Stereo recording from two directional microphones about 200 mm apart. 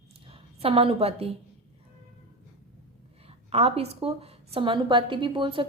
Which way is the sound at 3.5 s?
30° right (ahead or behind).